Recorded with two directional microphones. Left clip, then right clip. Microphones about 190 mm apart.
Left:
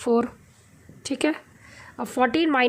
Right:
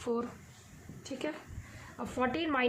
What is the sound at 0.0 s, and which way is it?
Speech, 40° left (ahead or behind).